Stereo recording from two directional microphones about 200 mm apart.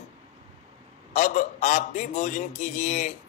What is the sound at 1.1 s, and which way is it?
A man's voice, 35° left (ahead or behind).